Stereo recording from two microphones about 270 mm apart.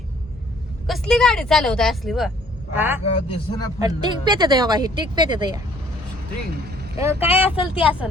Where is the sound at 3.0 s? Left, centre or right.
Left.